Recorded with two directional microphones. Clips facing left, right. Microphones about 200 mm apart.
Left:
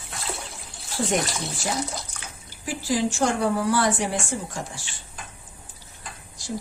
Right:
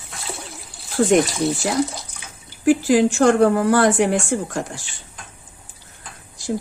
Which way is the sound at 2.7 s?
60° right (ahead or behind).